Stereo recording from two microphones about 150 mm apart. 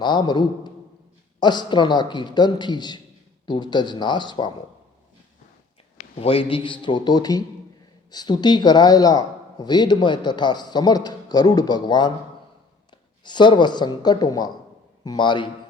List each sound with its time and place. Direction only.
0.0 s a man's voice: 30° left (ahead or behind)
6.0 s a man's voice: 40° left (ahead or behind)